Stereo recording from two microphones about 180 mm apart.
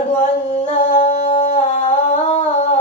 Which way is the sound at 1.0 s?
35° left (ahead or behind).